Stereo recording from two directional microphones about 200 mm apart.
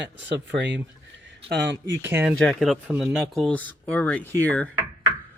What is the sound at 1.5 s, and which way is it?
Speech, 60° right (ahead or behind).